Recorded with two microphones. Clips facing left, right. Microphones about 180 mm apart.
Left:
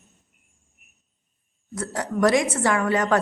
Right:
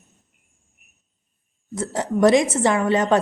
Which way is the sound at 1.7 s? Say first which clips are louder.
Right 4 dB; 25° right (ahead or behind).